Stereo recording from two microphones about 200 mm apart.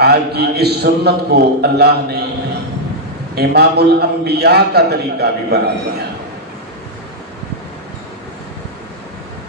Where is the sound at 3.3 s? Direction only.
50° right (ahead or behind).